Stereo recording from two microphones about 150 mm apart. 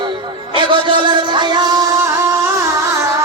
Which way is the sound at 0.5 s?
30° right (ahead or behind).